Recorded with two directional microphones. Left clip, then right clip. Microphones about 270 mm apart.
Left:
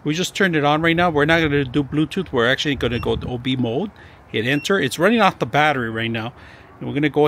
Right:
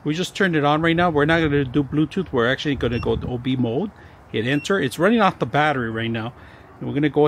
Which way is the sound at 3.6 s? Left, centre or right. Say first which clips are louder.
Even; left.